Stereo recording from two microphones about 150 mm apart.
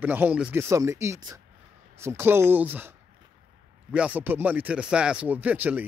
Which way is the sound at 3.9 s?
10° right (ahead or behind).